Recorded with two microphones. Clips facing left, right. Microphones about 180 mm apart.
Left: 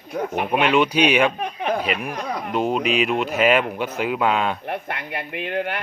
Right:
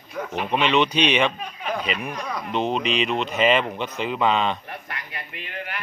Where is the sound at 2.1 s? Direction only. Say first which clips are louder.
Left 3 dB; 50° left (ahead or behind).